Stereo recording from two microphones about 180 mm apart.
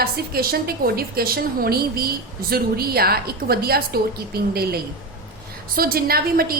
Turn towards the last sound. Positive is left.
turn(degrees=-55)  # may be behind; listen again after turning